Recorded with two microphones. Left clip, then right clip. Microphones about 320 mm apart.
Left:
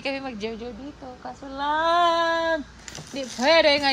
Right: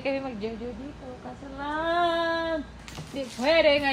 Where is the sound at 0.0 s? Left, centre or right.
Centre.